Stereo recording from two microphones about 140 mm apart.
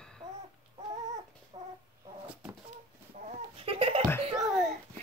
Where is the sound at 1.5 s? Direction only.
35° right (ahead or behind).